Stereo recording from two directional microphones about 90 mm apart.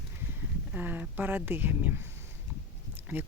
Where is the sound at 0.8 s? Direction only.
20° right (ahead or behind).